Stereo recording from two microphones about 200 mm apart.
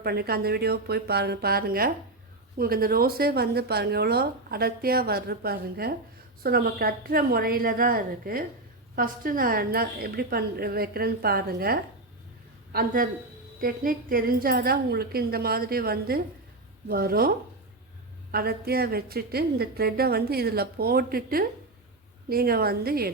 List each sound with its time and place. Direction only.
0.0 s speech: 50° right (ahead or behind)